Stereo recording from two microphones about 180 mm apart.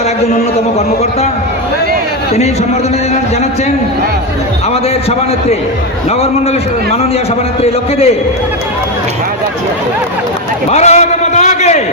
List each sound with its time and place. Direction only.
4.7 s a man's voice: 35° left (ahead or behind)
7.6 s a man's voice: 35° left (ahead or behind)
10.7 s a man's voice: 40° left (ahead or behind)